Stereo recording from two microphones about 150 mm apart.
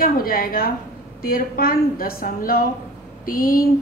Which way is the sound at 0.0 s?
75° left (ahead or behind).